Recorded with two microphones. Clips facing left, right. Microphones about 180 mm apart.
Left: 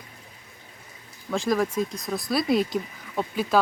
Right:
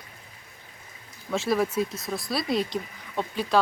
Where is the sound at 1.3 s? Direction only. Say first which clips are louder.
Left 1 dB; 5° right (ahead or behind).